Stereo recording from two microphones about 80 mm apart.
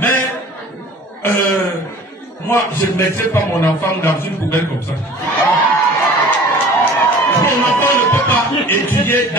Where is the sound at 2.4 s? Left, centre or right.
Left.